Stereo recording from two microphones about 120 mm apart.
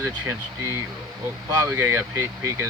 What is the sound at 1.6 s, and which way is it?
Speech, 20° right (ahead or behind).